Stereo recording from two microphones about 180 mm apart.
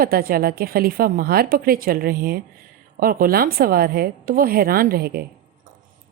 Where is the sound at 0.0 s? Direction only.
55° right (ahead or behind).